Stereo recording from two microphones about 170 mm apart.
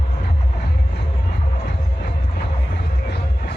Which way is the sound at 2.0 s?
70° left (ahead or behind).